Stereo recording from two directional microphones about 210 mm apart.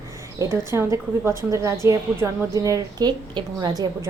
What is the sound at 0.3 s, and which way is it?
A woman's voice, 10° right (ahead or behind).